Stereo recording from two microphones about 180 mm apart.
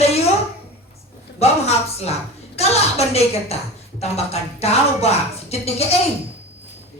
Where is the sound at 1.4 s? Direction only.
35° left (ahead or behind).